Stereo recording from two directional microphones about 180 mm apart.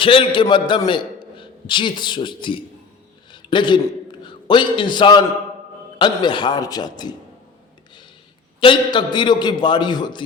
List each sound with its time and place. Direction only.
0.0 s a man's voice: 30° left (ahead or behind)
8.6 s a man's voice: 25° left (ahead or behind)